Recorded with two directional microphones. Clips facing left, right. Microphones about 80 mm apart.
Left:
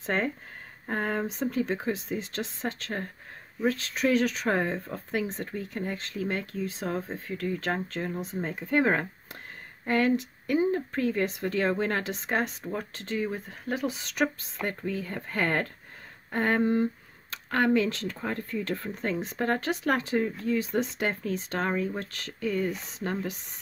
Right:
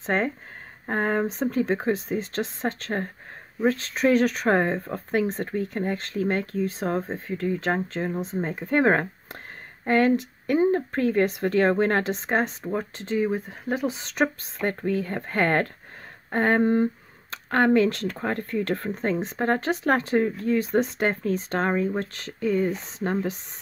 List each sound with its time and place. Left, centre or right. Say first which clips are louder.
0.0 s speech: right 4 dB; right